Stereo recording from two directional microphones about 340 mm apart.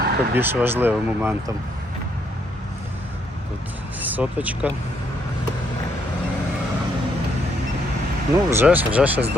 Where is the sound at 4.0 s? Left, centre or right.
Centre.